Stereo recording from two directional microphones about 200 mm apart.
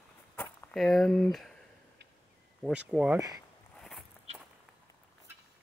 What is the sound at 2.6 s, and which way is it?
Speech, 5° right (ahead or behind).